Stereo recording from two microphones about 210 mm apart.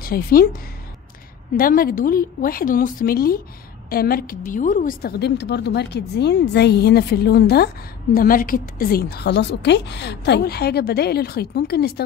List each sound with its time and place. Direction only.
0.0 s a woman's voice: 45° left (ahead or behind)
1.6 s a woman's voice: 45° left (ahead or behind)